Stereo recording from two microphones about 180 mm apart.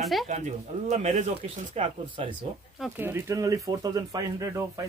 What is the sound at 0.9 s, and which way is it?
A man's voice, 40° right (ahead or behind).